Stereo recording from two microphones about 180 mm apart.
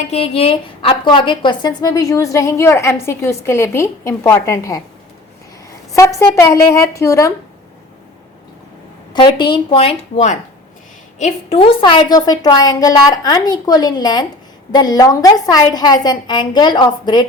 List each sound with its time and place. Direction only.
0.1 s a woman's voice: 35° left (ahead or behind); by 4.8 s 20° left (ahead or behind)
5.9 s a woman's voice: 15° left (ahead or behind)
9.1 s a woman's voice: 25° left (ahead or behind)